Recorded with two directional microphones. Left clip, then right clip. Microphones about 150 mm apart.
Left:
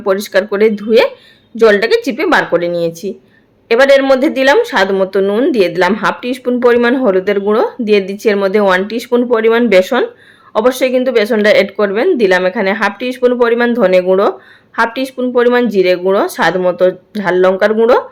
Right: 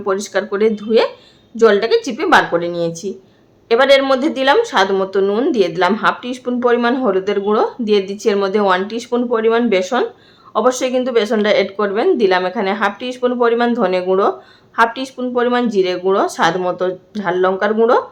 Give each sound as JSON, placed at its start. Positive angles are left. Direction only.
{"t": 0.0, "sound": "speech", "side_deg": 20}